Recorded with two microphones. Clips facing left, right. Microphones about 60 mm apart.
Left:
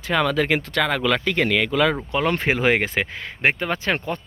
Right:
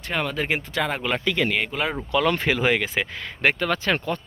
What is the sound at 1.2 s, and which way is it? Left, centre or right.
Speech, left.